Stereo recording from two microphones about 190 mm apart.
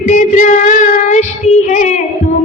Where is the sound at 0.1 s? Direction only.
40° left (ahead or behind).